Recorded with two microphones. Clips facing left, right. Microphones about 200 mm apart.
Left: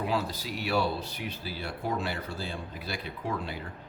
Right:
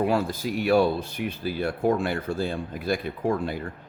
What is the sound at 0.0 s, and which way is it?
A man's voice, 50° right (ahead or behind).